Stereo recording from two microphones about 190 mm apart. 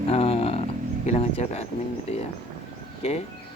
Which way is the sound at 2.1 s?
35° left (ahead or behind).